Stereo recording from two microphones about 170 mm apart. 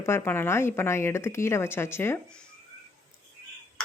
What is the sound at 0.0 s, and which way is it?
Speech, 15° left (ahead or behind).